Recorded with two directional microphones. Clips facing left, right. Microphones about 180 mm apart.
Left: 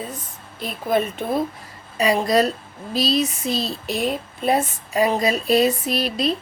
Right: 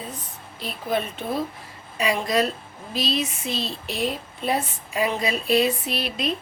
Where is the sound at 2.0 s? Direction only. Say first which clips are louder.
Left 4 dB; 40° left (ahead or behind).